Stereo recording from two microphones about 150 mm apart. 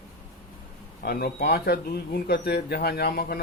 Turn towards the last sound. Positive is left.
turn(degrees=90)